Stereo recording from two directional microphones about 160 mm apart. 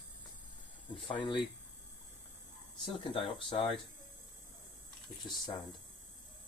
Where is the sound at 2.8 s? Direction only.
30° left (ahead or behind).